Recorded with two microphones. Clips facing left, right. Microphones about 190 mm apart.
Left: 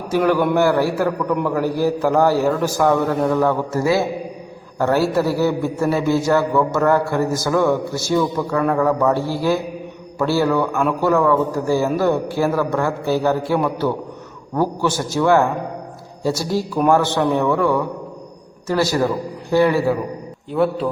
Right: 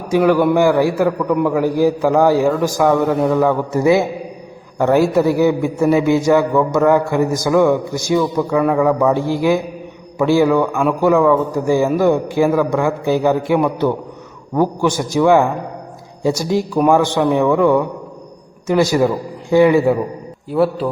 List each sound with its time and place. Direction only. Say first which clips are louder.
0.1 s a man's voice: right 4 dB; 10° right (ahead or behind)
20.5 s a man's voice: right 2 dB; 5° right (ahead or behind)